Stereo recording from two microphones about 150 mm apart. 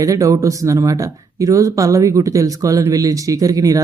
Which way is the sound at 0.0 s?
20° right (ahead or behind).